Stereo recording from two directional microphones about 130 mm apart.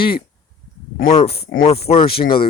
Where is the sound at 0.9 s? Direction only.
90° left.